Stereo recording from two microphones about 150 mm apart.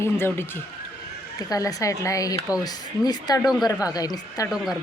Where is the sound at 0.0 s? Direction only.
15° left (ahead or behind).